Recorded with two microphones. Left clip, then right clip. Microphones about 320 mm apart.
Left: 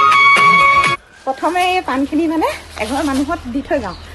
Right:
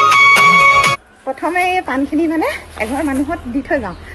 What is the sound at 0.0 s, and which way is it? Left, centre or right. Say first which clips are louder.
Music: right 1 dB; right.